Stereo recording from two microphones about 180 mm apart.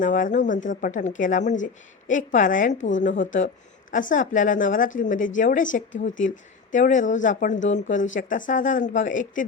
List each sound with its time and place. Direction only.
0.0 s a woman's voice: 45° left (ahead or behind)